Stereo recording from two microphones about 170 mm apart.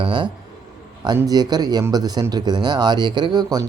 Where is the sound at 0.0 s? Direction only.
30° right (ahead or behind).